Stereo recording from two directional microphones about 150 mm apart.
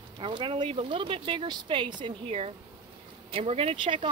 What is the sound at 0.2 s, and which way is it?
Speech, 35° right (ahead or behind).